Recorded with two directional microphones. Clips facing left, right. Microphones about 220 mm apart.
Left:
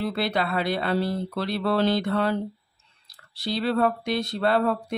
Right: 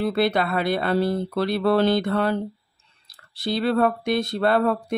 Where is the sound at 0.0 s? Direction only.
50° right (ahead or behind).